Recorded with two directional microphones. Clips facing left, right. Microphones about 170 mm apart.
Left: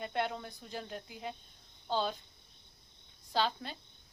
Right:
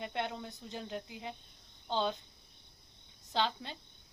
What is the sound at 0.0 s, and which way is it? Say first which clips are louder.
Speech: left 2 dB; 20° right (ahead or behind).